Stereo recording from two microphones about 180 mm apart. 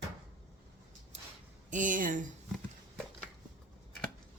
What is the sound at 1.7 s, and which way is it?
Speech, 45° right (ahead or behind).